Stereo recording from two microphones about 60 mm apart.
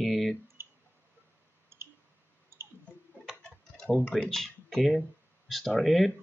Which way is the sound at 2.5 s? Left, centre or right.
Right.